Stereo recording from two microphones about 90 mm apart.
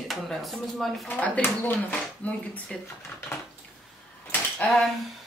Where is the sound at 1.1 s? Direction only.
15° left (ahead or behind).